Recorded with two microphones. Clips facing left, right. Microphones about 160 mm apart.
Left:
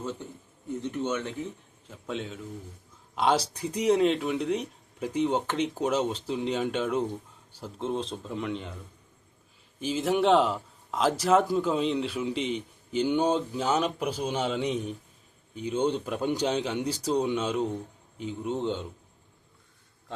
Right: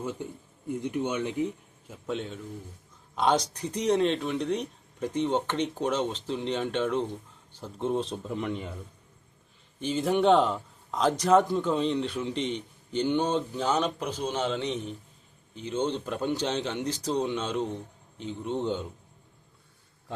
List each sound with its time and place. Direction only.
0.0 s speech: 10° right (ahead or behind)
2.0 s a man's voice: centre (ahead or behind)
9.8 s a man's voice: 5° left (ahead or behind)